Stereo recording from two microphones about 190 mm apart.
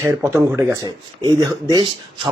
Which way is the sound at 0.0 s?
15° right (ahead or behind).